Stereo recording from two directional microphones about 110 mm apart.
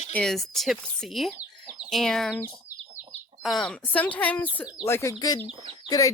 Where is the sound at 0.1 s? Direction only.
5° left (ahead or behind).